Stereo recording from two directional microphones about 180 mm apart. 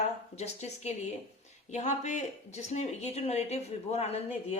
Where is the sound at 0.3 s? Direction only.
40° left (ahead or behind).